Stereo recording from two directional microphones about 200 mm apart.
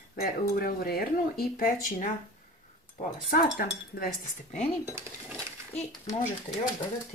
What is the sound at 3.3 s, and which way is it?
Speech, 50° left (ahead or behind).